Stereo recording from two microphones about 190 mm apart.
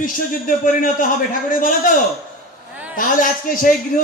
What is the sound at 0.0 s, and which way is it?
A man's voice, 45° left (ahead or behind).